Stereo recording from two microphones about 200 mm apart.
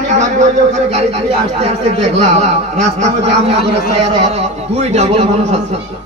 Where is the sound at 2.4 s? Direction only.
35° right (ahead or behind).